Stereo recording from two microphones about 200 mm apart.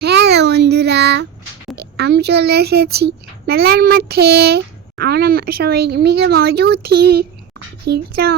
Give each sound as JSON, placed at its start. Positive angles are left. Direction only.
{"t": 0.0, "sound": "child singing", "side_deg": -55}
{"t": 1.7, "sound": "speech", "side_deg": -55}